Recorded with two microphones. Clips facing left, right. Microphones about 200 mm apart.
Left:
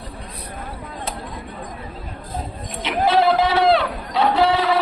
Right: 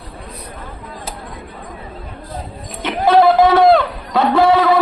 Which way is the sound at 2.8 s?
50° right (ahead or behind).